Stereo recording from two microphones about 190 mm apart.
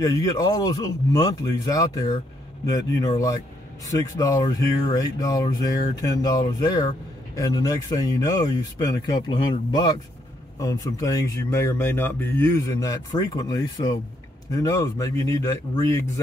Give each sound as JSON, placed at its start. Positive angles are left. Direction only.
{"t": 0.0, "sound": "speech", "side_deg": 20}
{"t": 3.9, "sound": "speech", "side_deg": 20}